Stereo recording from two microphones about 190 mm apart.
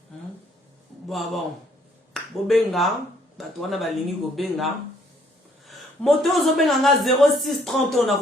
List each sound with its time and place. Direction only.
1.0 s a man's voice: centre (ahead or behind)